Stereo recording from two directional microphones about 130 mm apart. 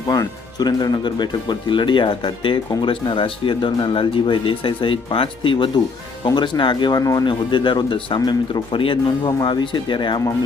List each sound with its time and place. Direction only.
0.1 s speech: 30° left (ahead or behind)
7.3 s speech: 40° left (ahead or behind)